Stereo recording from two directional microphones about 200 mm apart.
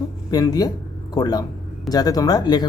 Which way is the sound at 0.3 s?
20° left (ahead or behind).